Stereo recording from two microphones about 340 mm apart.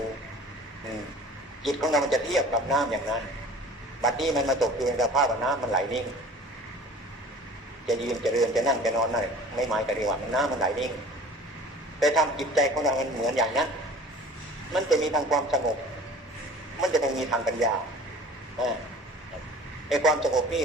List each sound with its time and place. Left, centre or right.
1.6 s a man's voice: centre
7.9 s a man's voice: centre
11.9 s a man's voice: centre
14.7 s a man's voice: centre
16.8 s a man's voice: centre
19.9 s a man's voice: centre